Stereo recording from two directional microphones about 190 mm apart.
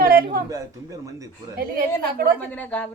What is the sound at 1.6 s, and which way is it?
Speech, 50° right (ahead or behind).